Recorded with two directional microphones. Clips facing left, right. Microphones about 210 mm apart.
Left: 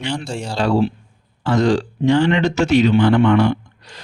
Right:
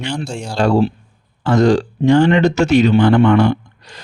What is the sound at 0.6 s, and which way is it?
Speech, 45° right (ahead or behind).